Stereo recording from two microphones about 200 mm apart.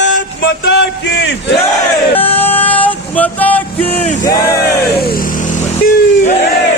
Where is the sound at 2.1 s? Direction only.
30° left (ahead or behind).